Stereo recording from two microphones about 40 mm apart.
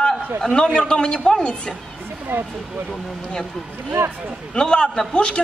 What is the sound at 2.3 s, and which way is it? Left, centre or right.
Speech, right.